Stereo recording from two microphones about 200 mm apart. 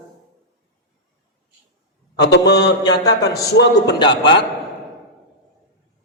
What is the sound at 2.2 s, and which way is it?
A man's voice, 60° left (ahead or behind).